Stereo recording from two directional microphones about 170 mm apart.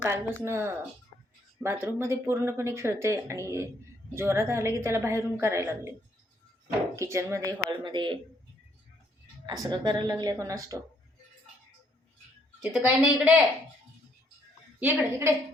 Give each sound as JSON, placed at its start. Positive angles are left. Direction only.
{"t": 0.0, "sound": "speech", "side_deg": -15}
{"t": 6.9, "sound": "speech", "side_deg": -15}
{"t": 7.7, "sound": "a woman's voice", "side_deg": -30}
{"t": 9.5, "sound": "a woman's voice", "side_deg": -25}
{"t": 12.7, "sound": "a woman's voice", "side_deg": -5}
{"t": 14.8, "sound": "speech", "side_deg": -10}